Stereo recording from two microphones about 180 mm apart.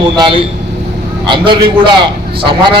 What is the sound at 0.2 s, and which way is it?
A man's voice, 30° right (ahead or behind).